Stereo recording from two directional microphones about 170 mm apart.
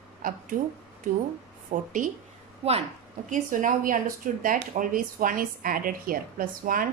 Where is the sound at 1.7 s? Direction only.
50° right (ahead or behind).